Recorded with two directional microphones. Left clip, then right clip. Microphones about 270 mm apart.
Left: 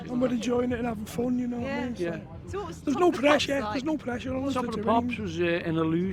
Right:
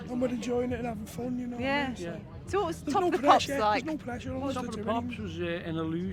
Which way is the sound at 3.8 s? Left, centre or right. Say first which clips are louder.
Left 5 dB; left.